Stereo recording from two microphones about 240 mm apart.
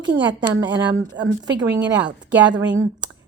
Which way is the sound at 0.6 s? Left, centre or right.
Right.